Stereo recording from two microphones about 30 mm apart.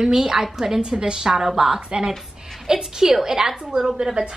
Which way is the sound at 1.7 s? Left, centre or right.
Right.